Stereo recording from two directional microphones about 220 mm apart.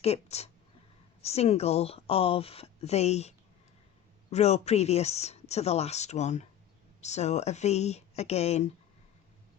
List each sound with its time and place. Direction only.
0.0 s speech: 30° left (ahead or behind)